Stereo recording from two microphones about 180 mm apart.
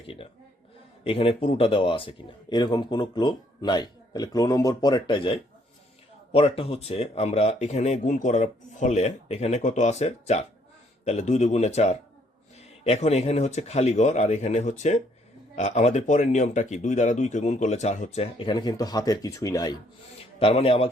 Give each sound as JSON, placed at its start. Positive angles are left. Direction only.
{"t": 1.0, "sound": "speech", "side_deg": 30}
{"t": 20.4, "sound": "speech", "side_deg": 35}